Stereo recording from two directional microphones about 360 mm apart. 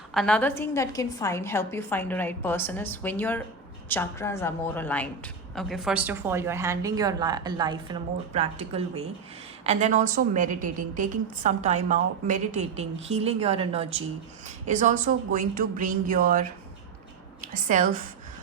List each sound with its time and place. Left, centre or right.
0.1 s a woman's voice: centre; by 18.0 s right